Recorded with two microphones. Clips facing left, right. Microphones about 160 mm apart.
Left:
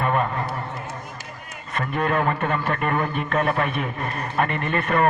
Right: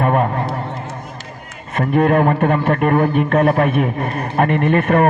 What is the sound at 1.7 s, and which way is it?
A man's voice, 50° right (ahead or behind).